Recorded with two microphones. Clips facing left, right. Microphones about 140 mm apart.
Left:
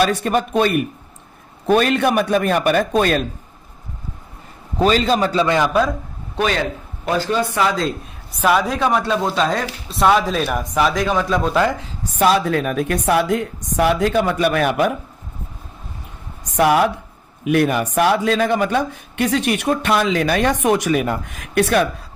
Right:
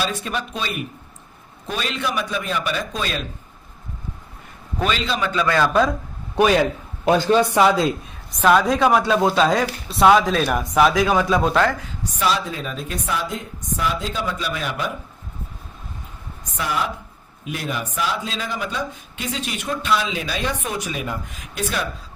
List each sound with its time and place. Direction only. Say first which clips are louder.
0.0 s a man's voice: left 8 dB; 60° left (ahead or behind)
4.8 s a man's voice: left 7 dB; 40° left (ahead or behind)
5.5 s speech: left 2 dB; 20° left (ahead or behind)
6.3 s speech: right 4 dB; 10° right (ahead or behind)
7.6 s speech: right 3 dB; 25° right (ahead or behind)
8.3 s speech: right 1 dB; 10° left (ahead or behind)
11.5 s speech: left 1 dB; 15° left (ahead or behind)
12.2 s a man's voice: left 7 dB; 60° left (ahead or behind)
16.6 s a man's voice: left 10 dB; 65° left (ahead or behind)